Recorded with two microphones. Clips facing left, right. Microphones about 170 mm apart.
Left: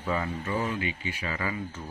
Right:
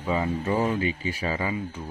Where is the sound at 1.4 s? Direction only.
25° right (ahead or behind).